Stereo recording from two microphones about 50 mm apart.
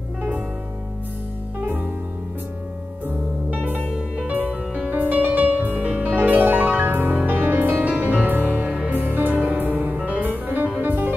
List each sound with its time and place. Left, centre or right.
1.6 s music: right
3.4 s music: right
9.9 s music: right
10.2 s music: right